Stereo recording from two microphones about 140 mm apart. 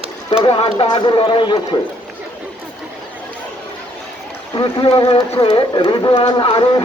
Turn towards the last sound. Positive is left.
turn(degrees=35)  # may be behind; listen again after turning